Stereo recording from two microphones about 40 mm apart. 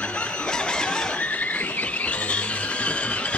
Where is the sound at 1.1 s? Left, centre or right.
Left.